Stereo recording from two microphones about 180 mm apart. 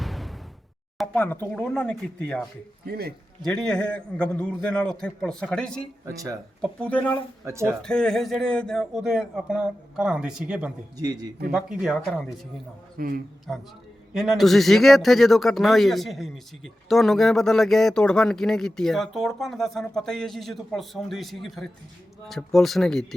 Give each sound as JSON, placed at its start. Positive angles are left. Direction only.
{"t": 0.0, "sound": "a sound", "side_deg": 0}
{"t": 0.9, "sound": "speech", "side_deg": 10}
{"t": 2.8, "sound": "a man's voice", "side_deg": -60}
{"t": 3.4, "sound": "a man's voice", "side_deg": 5}
{"t": 7.4, "sound": "speech", "side_deg": -15}
{"t": 7.8, "sound": "a man's voice", "side_deg": 5}
{"t": 10.9, "sound": "a man's voice", "side_deg": -20}
{"t": 11.5, "sound": "a man's voice", "side_deg": -5}
{"t": 13.0, "sound": "a man's voice", "side_deg": -55}
{"t": 14.1, "sound": "a man's voice", "side_deg": 0}